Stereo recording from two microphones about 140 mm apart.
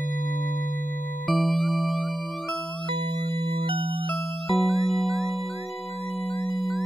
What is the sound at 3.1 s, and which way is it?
Music, 35° right (ahead or behind).